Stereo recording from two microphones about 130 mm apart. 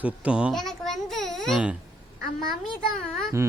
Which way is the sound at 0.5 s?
5° left (ahead or behind).